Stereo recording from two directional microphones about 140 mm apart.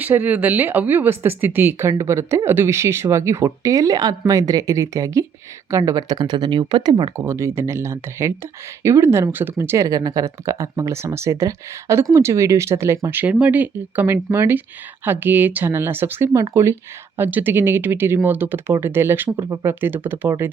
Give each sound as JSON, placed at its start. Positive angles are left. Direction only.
{"t": 0.0, "sound": "speech", "side_deg": -10}